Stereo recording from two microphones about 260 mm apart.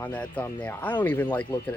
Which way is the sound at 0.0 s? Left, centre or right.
Centre.